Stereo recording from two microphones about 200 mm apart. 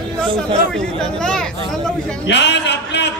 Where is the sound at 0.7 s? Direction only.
5° left (ahead or behind).